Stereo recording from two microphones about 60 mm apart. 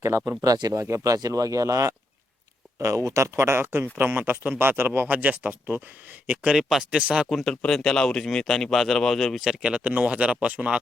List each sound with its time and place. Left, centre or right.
0.3 s speech: right
6.6 s speech: centre
7.4 s speech: centre
9.5 s speech: centre